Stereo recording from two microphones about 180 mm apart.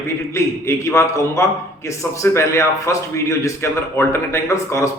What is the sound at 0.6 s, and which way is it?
A man's voice, 15° left (ahead or behind).